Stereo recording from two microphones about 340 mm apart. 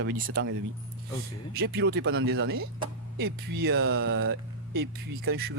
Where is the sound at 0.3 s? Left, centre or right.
Right.